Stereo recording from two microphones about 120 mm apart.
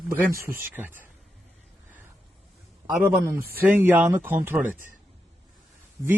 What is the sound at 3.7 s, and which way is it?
Speech, 15° right (ahead or behind).